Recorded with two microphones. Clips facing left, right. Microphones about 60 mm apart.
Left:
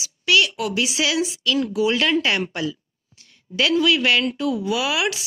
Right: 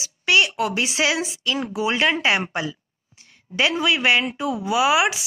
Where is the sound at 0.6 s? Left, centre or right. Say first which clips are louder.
Right 1 dB; right.